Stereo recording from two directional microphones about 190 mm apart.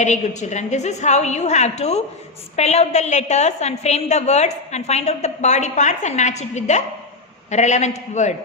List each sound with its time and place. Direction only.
0.0 s a woman's voice: 40° left (ahead or behind)